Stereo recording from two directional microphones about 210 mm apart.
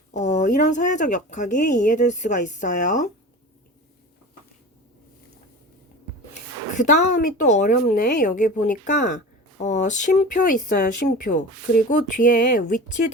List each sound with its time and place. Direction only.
0.1 s speech: 35° left (ahead or behind)
6.7 s speech: 35° left (ahead or behind)